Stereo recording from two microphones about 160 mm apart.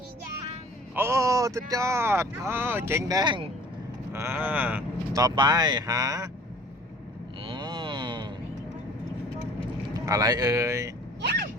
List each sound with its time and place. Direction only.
0.9 s speech: 15° right (ahead or behind)
4.1 s speech: 15° right (ahead or behind)
5.1 s speech: 25° right (ahead or behind)
7.4 s a sound: 30° right (ahead or behind)
9.9 s speech: 20° right (ahead or behind)
11.2 s a sound: 90° right